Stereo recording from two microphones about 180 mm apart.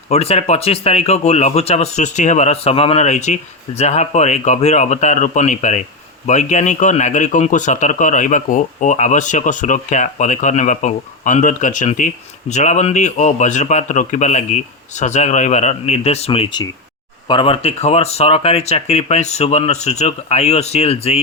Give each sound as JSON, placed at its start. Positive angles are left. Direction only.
{"t": 0.1, "sound": "speech", "side_deg": 35}